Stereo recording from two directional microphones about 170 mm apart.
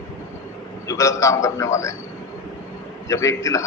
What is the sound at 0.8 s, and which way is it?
A man's voice, 20° left (ahead or behind).